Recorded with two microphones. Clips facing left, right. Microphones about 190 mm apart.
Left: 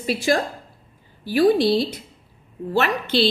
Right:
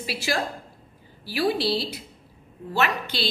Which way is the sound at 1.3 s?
50° left (ahead or behind).